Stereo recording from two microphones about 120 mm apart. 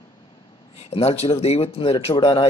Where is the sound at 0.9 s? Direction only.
60° left (ahead or behind).